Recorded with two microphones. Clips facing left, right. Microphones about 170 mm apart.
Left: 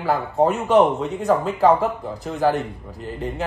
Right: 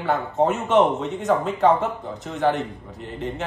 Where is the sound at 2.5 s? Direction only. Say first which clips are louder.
Left 2 dB; 35° left (ahead or behind).